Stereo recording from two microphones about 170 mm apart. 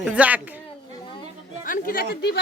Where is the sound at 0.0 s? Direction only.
10° right (ahead or behind).